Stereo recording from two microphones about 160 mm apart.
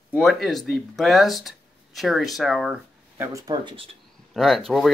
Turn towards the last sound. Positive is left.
turn(degrees=0)  # may be behind; listen again after turning